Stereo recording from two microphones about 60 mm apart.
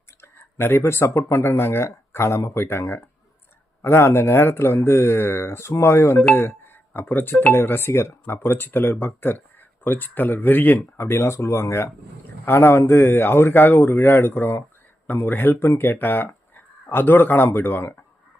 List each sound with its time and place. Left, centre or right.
0.8 s speech: left
6.3 s music: left
7.0 s speech: left
8.4 s speech: left
10.9 s speech: left